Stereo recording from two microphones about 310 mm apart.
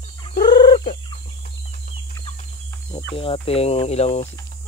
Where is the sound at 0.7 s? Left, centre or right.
Centre.